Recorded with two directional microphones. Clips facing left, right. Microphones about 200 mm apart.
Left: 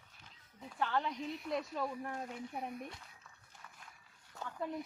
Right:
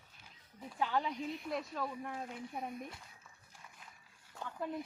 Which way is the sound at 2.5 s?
10° left (ahead or behind).